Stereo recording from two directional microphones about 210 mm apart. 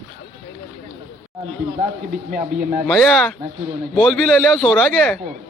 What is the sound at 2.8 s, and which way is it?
A man's voice, centre (ahead or behind).